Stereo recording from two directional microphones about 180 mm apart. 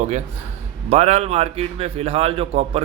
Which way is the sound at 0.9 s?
35° right (ahead or behind).